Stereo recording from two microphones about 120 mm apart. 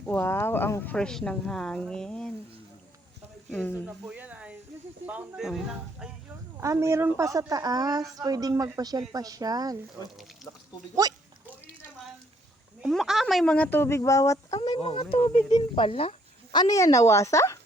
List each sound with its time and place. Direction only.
0.0 s speech: 15° left (ahead or behind)
0.9 s a woman's voice: 5° left (ahead or behind)
3.5 s speech: 10° left (ahead or behind)
3.8 s snake: 10° right (ahead or behind)
5.4 s a woman's voice: 5° right (ahead or behind)
6.6 s a woman's voice: 25° right (ahead or behind)
12.8 s a woman's voice: centre (ahead or behind)
13.7 s speech: 20° left (ahead or behind)
14.6 s speech: 50° left (ahead or behind)
16.5 s speech: 35° left (ahead or behind)